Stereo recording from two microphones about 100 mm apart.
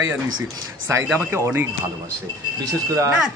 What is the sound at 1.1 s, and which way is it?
Speech, 20° right (ahead or behind).